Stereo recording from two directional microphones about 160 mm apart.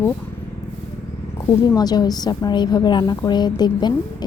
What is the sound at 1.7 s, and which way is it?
A woman's voice, 25° left (ahead or behind).